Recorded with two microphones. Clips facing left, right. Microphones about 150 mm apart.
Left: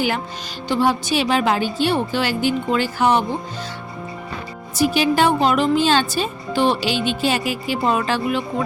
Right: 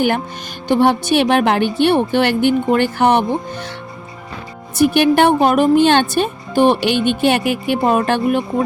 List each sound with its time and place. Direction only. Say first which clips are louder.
0.7 s speech: right 5 dB; 60° right (ahead or behind)
4.8 s speech: right 5 dB; 60° right (ahead or behind)